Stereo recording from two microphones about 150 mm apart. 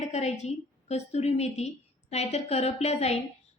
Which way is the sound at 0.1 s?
45° left (ahead or behind).